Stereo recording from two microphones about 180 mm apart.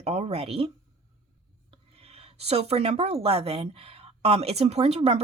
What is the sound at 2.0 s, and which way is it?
Speech, 35° right (ahead or behind).